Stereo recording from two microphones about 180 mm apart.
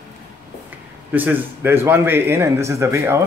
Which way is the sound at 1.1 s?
10° right (ahead or behind).